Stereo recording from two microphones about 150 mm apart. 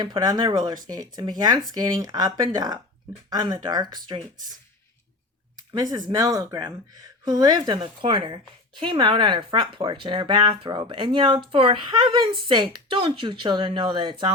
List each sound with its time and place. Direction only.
0.0 s speech: 25° right (ahead or behind)
5.7 s a woman's voice: 25° right (ahead or behind)